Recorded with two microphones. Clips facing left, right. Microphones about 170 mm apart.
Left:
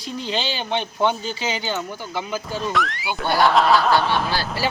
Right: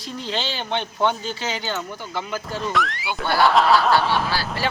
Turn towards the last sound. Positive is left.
turn(degrees=5)  # may be behind; listen again after turning